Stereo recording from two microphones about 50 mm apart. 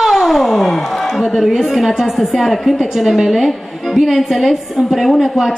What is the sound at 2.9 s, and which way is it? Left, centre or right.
Speech, centre.